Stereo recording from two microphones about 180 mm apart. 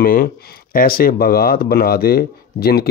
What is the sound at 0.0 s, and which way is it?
Speech, 55° left (ahead or behind).